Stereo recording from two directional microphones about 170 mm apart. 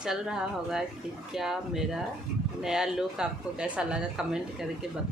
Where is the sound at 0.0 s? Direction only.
5° right (ahead or behind).